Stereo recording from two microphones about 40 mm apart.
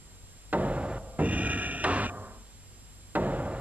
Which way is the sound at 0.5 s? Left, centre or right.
Right.